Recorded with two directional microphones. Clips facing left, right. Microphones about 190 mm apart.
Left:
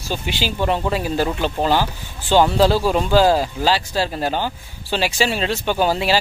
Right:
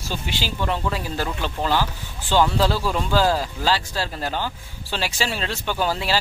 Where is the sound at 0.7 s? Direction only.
20° left (ahead or behind).